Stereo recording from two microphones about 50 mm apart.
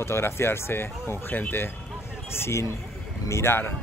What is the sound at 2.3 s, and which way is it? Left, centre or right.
Speech, left.